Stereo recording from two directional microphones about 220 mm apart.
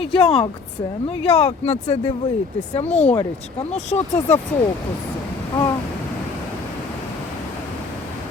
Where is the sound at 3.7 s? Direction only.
30° left (ahead or behind).